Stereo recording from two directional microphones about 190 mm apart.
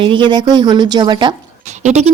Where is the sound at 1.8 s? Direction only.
35° right (ahead or behind).